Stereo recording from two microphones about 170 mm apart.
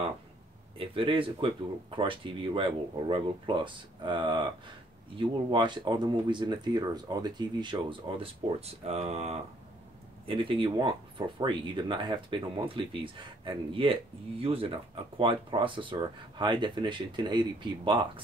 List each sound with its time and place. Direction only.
0.7 s speech: 30° right (ahead or behind)